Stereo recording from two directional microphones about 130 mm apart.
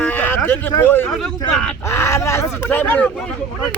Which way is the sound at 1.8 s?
20° left (ahead or behind).